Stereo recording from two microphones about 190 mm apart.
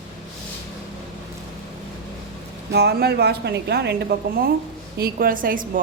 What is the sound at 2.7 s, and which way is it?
A woman's voice, 55° right (ahead or behind).